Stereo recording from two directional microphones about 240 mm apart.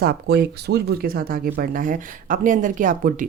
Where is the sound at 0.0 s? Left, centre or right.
Right.